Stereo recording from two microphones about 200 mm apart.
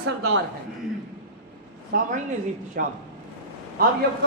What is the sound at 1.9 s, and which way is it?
A man's voice, 45° right (ahead or behind).